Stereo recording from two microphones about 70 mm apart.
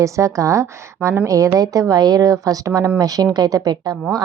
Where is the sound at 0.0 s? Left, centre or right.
Right.